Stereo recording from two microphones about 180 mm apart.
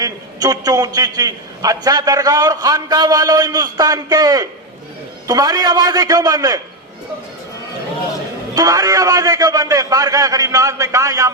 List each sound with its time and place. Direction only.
0.0 s a man's voice: 20° right (ahead or behind)
8.5 s a man's voice: 20° right (ahead or behind)